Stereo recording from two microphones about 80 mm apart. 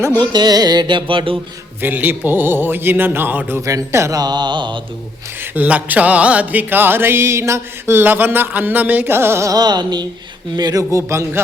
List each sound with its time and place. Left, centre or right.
0.2 s music: right
1.8 s music: right
3.7 s a man's voice: right
4.2 s a sound: right
5.4 s music: centre
9.5 s music: right
10.9 s a man's voice: right